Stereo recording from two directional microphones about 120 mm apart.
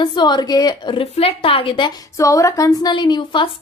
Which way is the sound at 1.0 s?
55° left (ahead or behind).